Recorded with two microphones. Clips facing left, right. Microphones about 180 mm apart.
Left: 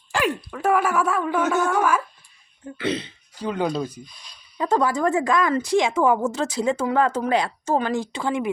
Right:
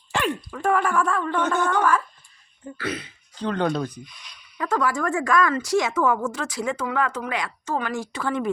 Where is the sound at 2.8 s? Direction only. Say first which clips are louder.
Left 5 dB; 25° left (ahead or behind).